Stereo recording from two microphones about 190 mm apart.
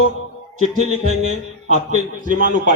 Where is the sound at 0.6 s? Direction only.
40° right (ahead or behind).